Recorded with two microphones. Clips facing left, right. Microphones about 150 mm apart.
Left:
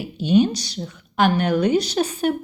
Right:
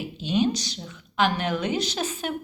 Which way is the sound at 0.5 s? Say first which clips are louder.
Left 4 dB; 35° left (ahead or behind).